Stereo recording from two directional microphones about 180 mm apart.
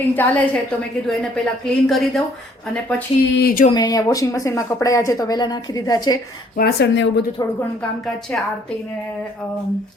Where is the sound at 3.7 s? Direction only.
20° left (ahead or behind).